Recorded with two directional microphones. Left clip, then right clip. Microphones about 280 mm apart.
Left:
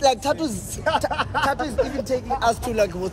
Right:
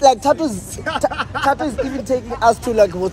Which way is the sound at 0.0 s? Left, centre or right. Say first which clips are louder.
Right 7 dB; centre.